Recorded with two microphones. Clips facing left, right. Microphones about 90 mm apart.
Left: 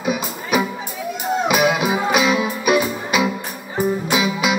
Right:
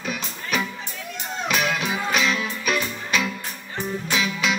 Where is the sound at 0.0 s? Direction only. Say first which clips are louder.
Left 8 dB; 10° left (ahead or behind).